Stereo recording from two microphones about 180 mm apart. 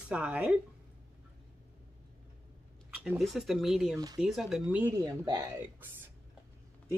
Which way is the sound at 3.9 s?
20° right (ahead or behind).